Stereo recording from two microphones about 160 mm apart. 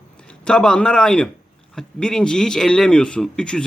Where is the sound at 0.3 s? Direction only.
5° left (ahead or behind).